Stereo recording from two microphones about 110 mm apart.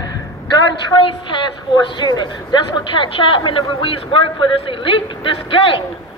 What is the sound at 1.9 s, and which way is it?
A man's voice, 40° left (ahead or behind).